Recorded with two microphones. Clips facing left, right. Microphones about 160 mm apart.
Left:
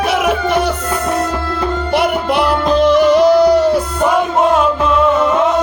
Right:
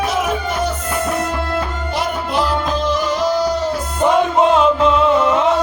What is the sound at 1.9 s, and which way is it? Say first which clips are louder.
Music: left 5 dB; 65° left (ahead or behind).